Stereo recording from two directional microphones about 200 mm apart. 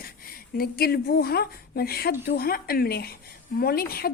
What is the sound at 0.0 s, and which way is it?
A woman's voice, 50° left (ahead or behind).